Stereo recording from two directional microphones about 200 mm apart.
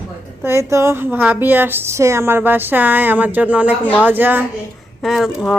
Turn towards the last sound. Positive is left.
turn(degrees=0)  # may be behind; listen again after turning